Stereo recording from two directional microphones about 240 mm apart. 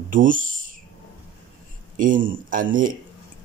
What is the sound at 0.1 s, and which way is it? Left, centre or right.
Speech, right.